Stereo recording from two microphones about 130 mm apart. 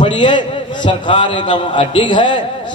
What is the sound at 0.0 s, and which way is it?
A man's voice, 35° left (ahead or behind).